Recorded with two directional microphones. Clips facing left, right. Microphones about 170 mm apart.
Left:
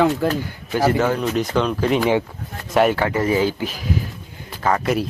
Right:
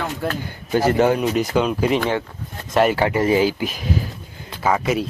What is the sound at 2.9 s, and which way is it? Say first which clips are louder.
Speech: right 2 dB; 15° right (ahead or behind).